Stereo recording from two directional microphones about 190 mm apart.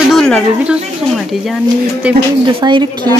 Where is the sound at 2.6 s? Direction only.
20° right (ahead or behind).